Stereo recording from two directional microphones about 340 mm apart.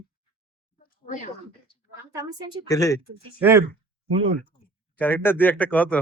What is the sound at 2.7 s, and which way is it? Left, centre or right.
Speech, centre.